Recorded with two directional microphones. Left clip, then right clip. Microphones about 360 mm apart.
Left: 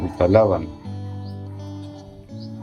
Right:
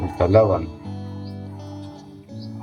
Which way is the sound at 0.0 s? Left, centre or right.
Centre.